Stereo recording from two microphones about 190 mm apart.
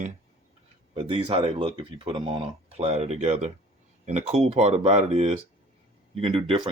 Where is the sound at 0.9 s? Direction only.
25° right (ahead or behind).